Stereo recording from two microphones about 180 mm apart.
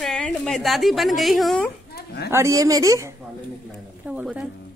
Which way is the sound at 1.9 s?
65° left (ahead or behind).